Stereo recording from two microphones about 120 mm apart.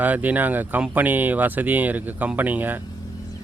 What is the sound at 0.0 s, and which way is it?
Speech, 15° right (ahead or behind).